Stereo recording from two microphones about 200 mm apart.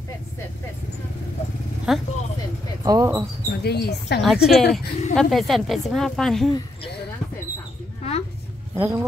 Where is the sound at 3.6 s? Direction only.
55° left (ahead or behind).